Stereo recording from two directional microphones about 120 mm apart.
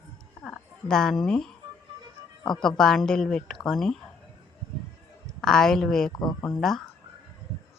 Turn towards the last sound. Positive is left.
turn(degrees=0)  # may be behind; listen again after turning